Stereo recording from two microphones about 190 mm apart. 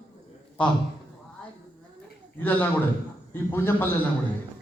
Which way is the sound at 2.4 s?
10° left (ahead or behind).